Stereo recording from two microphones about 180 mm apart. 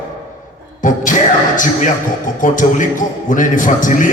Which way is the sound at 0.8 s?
45° left (ahead or behind).